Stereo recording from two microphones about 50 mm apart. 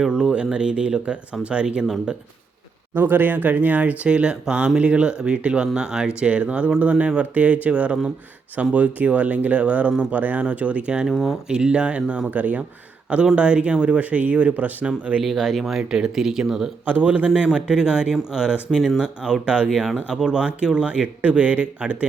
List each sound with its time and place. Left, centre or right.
0.0 s a man's voice: centre
2.9 s a man's voice: right
13.3 s a man's voice: right
15.2 s speech: centre
15.8 s speech: centre
16.8 s a man's voice: right